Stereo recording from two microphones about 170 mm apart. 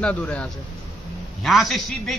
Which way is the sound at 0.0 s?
5° left (ahead or behind).